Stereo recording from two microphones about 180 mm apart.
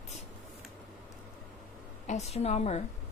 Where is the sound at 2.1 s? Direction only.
35° left (ahead or behind).